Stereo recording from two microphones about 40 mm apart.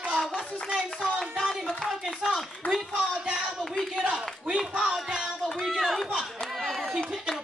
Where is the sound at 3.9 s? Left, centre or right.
Right.